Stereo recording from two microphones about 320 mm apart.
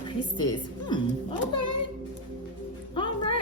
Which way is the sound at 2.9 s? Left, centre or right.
Centre.